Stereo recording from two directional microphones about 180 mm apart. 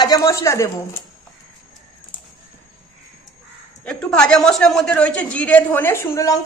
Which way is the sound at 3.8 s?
5° left (ahead or behind).